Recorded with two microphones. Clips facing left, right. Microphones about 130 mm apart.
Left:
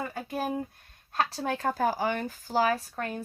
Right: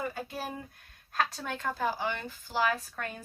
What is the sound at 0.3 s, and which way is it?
Speech, 45° left (ahead or behind).